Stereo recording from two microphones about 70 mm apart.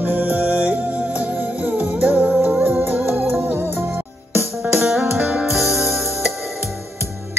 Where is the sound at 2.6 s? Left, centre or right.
Right.